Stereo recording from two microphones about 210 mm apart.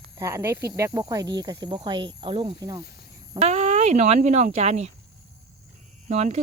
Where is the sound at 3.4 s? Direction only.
30° right (ahead or behind).